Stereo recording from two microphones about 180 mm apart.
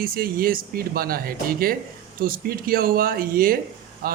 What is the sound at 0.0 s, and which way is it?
A man's voice, 55° right (ahead or behind).